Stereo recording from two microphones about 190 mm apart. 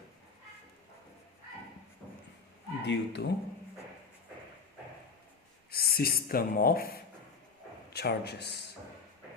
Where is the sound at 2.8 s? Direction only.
65° left (ahead or behind).